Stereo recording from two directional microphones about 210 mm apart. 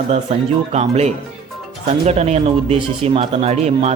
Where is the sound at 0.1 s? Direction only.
30° right (ahead or behind).